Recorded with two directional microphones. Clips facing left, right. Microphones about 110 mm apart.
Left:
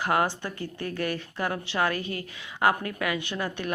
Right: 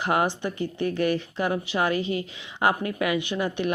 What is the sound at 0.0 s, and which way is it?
A woman's voice, 20° right (ahead or behind).